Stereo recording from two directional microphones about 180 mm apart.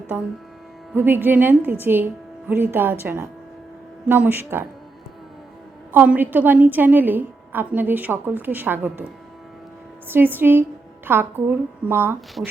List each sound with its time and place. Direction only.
0.1 s a woman's voice: 10° right (ahead or behind)
5.9 s a woman's voice: 10° right (ahead or behind)
10.1 s a woman's voice: 10° right (ahead or behind)